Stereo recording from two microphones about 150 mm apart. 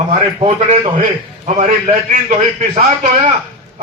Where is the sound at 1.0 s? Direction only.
55° right (ahead or behind).